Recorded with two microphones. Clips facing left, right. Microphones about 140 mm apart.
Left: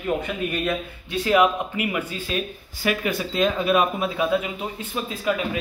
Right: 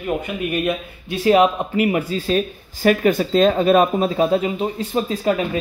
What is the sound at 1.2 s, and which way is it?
Speech, 30° right (ahead or behind).